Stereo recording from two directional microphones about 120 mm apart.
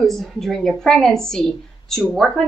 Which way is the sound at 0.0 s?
Centre (ahead or behind).